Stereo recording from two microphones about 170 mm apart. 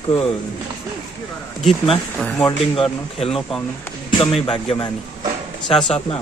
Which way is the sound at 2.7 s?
35° left (ahead or behind).